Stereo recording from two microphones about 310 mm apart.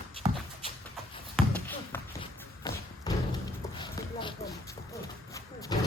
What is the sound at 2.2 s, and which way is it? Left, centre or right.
Thump, centre.